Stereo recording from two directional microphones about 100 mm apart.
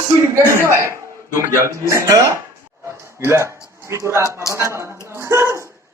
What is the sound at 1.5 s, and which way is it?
A man's voice, 30° right (ahead or behind).